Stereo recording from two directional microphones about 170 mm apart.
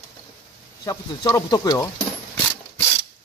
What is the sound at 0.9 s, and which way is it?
Speech, 20° left (ahead or behind).